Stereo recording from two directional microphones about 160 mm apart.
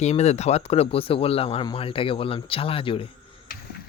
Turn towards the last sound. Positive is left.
turn(degrees=35)  # may be behind; listen again after turning